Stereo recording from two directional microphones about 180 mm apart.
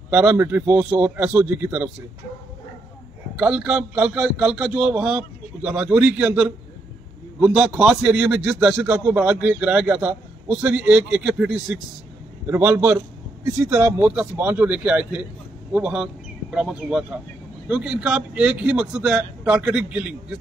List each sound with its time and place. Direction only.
0.1 s a man's voice: 10° right (ahead or behind)
3.3 s a man's voice: 5° right (ahead or behind)